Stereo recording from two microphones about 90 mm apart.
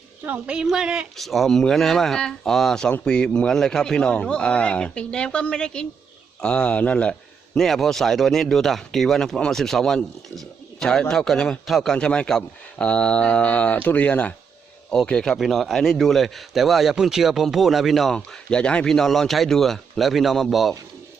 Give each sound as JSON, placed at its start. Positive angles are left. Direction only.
{"t": 0.3, "sound": "a woman's voice", "side_deg": -10}